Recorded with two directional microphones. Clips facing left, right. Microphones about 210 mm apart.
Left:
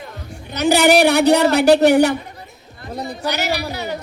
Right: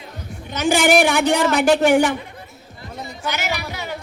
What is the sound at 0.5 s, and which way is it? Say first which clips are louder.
A woman's voice: left 2 dB; 40° left (ahead or behind).